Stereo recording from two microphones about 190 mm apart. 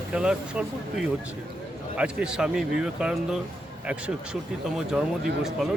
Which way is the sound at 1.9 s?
5° right (ahead or behind).